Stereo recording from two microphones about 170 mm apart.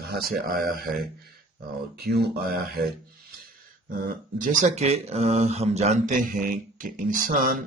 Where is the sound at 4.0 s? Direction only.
50° right (ahead or behind).